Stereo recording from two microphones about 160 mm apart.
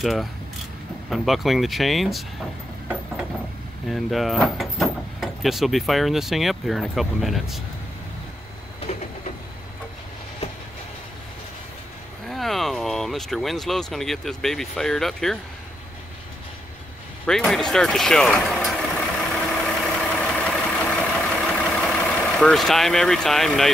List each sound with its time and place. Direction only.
0.0 s speech: centre (ahead or behind)
3.9 s speech: centre (ahead or behind)
8.9 s printer: 45° left (ahead or behind)
12.3 s speech: centre (ahead or behind)
17.3 s vehicle: 5° left (ahead or behind)
21.6 s speech: 5° left (ahead or behind)